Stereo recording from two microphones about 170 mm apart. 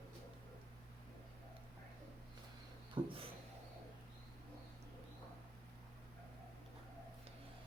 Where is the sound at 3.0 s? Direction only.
30° right (ahead or behind).